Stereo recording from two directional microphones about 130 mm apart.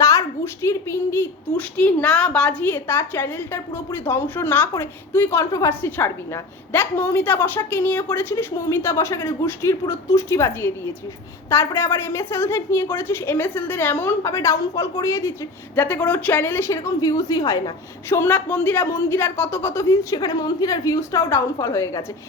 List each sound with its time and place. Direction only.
0.0 s a child's voice: 25° left (ahead or behind)
18.1 s a child's voice: 15° left (ahead or behind)